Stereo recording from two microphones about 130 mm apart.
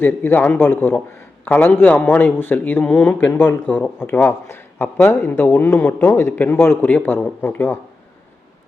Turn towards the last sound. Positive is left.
turn(degrees=15)  # may be behind; listen again after turning